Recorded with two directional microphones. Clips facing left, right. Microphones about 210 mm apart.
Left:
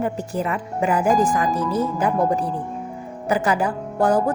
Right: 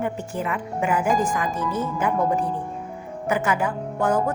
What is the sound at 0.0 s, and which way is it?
A woman's voice, 35° left (ahead or behind).